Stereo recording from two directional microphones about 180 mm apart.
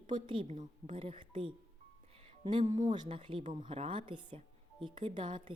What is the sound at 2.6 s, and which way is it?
Speech, 40° right (ahead or behind).